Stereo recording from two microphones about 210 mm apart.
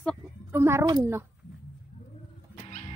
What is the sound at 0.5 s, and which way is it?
Speech, 10° right (ahead or behind).